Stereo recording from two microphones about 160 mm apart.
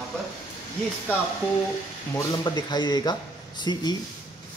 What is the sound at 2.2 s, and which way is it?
Speech, 25° left (ahead or behind).